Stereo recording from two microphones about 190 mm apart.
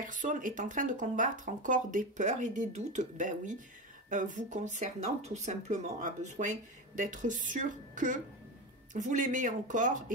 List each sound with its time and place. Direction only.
0.0 s speech: 40° right (ahead or behind)